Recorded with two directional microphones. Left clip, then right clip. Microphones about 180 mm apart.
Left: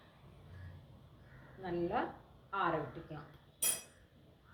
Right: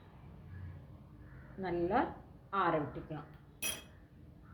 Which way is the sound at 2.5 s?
15° right (ahead or behind).